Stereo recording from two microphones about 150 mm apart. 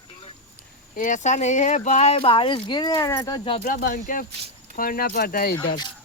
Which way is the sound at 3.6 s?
65° left (ahead or behind).